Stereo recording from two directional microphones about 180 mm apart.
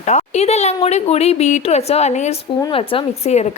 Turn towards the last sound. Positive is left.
turn(degrees=35)  # may be behind; listen again after turning